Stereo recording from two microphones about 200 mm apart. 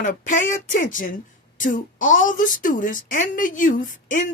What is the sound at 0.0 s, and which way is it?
Speech, 40° left (ahead or behind).